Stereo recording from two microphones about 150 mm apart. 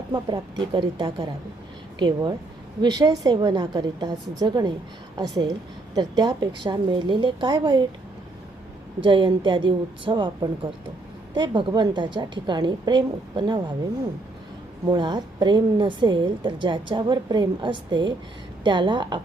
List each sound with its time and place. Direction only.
0.1 s a woman's voice: 30° right (ahead or behind)
9.0 s a woman's voice: 35° right (ahead or behind)
14.8 s a woman's voice: 30° right (ahead or behind)